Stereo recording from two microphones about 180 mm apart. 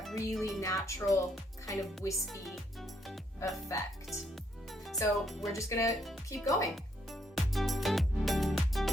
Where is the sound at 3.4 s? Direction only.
15° left (ahead or behind).